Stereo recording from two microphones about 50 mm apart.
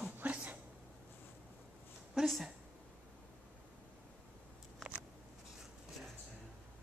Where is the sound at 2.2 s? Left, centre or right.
Centre.